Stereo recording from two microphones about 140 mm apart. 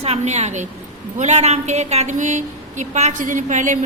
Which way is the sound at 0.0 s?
50° right (ahead or behind).